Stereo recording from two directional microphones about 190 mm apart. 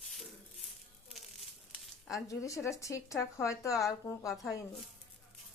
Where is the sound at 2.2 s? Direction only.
15° left (ahead or behind).